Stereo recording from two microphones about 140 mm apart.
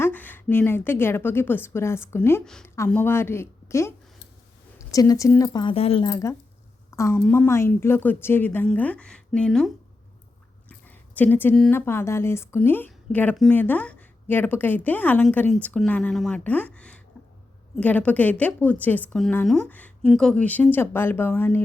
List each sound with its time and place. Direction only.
0.0 s a woman's voice: 10° left (ahead or behind)
2.4 s a woman's voice: 5° left (ahead or behind)
2.6 s a woman's voice: 20° left (ahead or behind)
5.7 s speech: 45° left (ahead or behind)
6.1 s a woman's voice: 25° left (ahead or behind); by 9.7 s centre (ahead or behind)
10.7 s a sound: 10° left (ahead or behind)
11.7 s a woman's voice: 15° left (ahead or behind)